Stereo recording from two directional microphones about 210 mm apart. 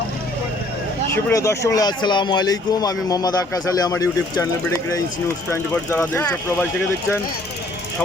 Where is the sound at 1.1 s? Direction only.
15° left (ahead or behind).